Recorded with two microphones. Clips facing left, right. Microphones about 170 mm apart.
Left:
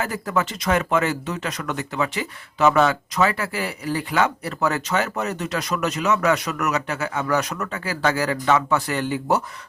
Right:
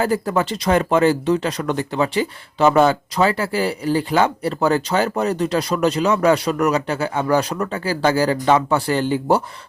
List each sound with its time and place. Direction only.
0.0 s speech: 30° right (ahead or behind)